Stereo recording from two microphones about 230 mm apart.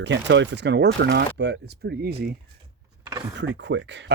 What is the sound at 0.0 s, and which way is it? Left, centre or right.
Speech, right.